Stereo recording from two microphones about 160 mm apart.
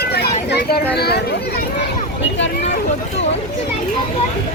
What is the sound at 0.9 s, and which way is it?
Speech, 90° left.